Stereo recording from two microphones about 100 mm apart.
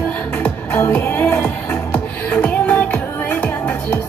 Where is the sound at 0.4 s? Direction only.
25° left (ahead or behind).